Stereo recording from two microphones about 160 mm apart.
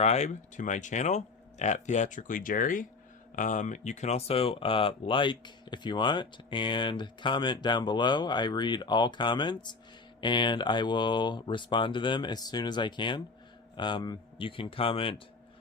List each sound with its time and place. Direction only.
0.0 s speech: 45° left (ahead or behind)